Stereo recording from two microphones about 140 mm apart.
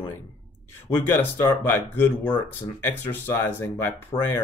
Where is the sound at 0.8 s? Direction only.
15° left (ahead or behind).